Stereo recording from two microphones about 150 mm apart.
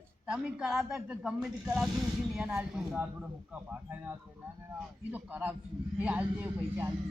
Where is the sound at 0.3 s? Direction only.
5° right (ahead or behind).